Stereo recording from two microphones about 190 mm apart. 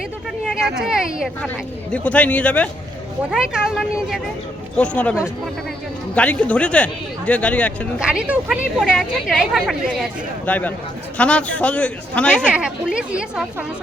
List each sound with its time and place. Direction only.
0.8 s speech: 5° right (ahead or behind)
1.9 s speech: 5° left (ahead or behind)
3.2 s speech: 5° right (ahead or behind)
6.1 s speech: 5° left (ahead or behind)
7.9 s speech: 5° right (ahead or behind)